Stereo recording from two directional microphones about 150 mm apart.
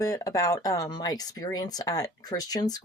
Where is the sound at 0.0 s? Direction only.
20° left (ahead or behind).